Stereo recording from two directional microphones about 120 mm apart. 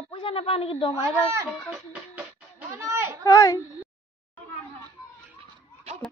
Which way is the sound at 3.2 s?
30° left (ahead or behind).